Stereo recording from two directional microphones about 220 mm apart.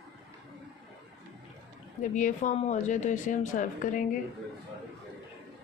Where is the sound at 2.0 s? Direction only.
35° left (ahead or behind).